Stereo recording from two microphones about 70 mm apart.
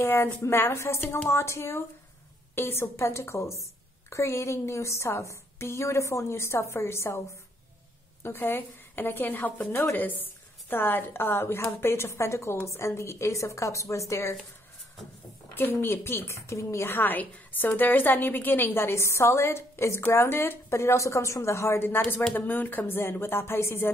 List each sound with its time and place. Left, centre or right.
0.1 s a woman's voice: left
8.2 s a woman's voice: left
15.5 s a woman's voice: left
16.9 s a woman's voice: left